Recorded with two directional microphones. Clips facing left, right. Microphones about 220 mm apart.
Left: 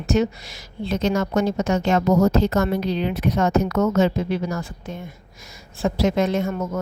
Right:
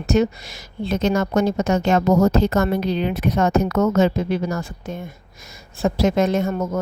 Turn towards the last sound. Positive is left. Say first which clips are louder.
# right 2 dB
turn(degrees=-40)  # may be behind; listen again after turning